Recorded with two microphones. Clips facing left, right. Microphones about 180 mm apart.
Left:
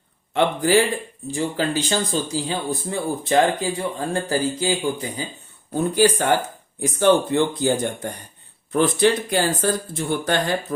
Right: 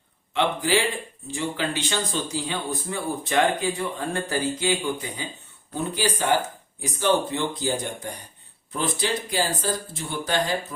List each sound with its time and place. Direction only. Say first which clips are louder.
0.3 s speech: left 5 dB; 45° left (ahead or behind)
5.7 s speech: left 8 dB; 50° left (ahead or behind)